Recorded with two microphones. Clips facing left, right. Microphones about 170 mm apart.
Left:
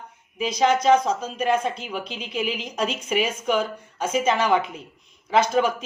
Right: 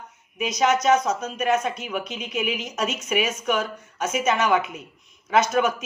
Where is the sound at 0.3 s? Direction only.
30° left (ahead or behind).